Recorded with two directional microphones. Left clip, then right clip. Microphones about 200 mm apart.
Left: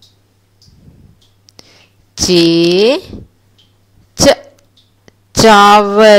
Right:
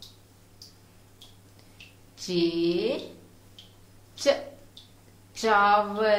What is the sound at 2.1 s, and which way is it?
Speech, 50° left (ahead or behind).